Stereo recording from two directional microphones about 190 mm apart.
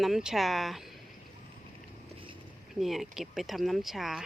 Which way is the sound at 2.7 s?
Centre (ahead or behind).